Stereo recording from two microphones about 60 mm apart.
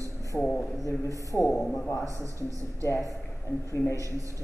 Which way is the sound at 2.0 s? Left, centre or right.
Right.